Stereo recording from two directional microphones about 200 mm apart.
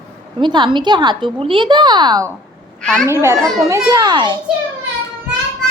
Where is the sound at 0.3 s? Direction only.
25° right (ahead or behind).